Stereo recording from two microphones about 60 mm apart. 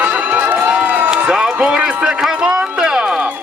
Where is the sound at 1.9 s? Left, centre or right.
Centre.